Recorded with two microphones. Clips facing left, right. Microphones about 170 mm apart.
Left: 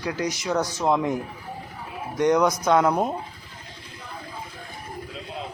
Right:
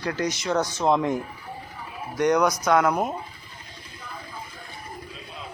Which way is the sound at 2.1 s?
20° left (ahead or behind).